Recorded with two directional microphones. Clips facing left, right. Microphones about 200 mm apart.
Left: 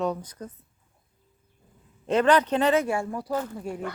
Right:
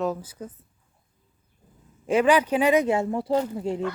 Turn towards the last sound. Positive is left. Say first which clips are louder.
# right 5 dB
turn(degrees=-20)  # may be behind; listen again after turning